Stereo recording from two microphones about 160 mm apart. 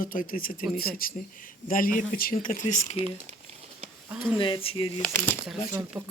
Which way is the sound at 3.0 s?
40° right (ahead or behind).